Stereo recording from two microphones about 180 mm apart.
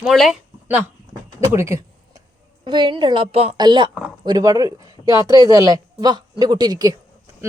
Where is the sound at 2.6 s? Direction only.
25° right (ahead or behind).